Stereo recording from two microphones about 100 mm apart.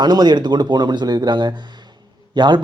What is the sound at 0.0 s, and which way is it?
A man's voice, 45° right (ahead or behind).